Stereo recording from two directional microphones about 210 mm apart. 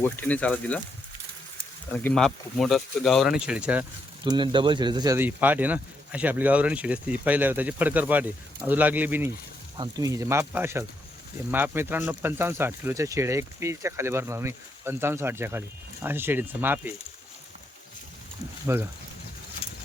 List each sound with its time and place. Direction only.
0.0 s speech: 10° left (ahead or behind)
1.9 s speech: 5° left (ahead or behind)
4.2 s speech: 20° right (ahead or behind)
18.7 s speech: 15° right (ahead or behind)
19.6 s horse: 30° left (ahead or behind)